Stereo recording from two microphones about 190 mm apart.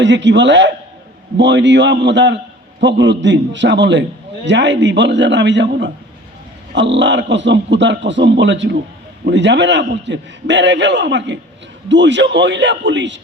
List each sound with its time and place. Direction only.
0.0 s a man's voice: 70° right (ahead or behind)